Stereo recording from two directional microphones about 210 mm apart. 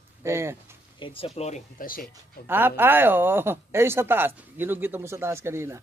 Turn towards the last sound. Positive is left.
turn(degrees=-10)  # may be behind; listen again after turning